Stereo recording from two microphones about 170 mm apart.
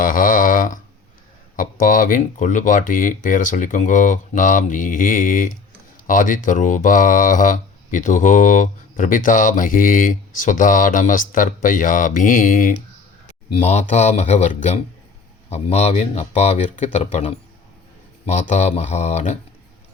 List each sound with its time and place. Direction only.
0.0 s a sound: 55° left (ahead or behind)
1.5 s speech: 50° left (ahead or behind)
13.5 s speech: 40° left (ahead or behind)